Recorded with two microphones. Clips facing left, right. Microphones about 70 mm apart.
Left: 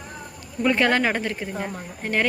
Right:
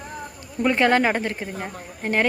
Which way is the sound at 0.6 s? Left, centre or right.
Right.